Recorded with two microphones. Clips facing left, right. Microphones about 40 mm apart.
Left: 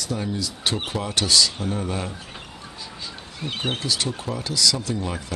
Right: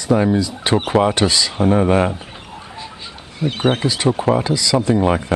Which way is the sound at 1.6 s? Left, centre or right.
Right.